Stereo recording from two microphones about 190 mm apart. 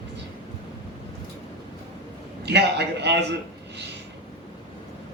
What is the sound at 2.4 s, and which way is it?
Speech, 60° right (ahead or behind).